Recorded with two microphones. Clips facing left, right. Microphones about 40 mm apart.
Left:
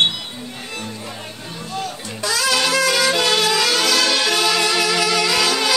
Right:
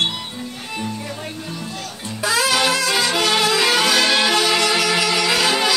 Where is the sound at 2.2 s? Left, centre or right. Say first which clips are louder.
Right 2 dB; right.